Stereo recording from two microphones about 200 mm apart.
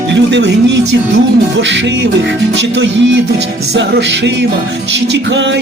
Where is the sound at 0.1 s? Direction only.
60° right (ahead or behind).